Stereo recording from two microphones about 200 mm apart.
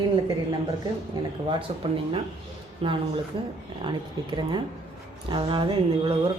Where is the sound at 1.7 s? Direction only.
25° right (ahead or behind).